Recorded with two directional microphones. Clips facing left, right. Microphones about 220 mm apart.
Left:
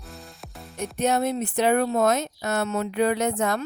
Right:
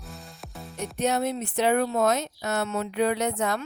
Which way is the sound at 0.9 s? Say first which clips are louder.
Left 2 dB; 50° left (ahead or behind).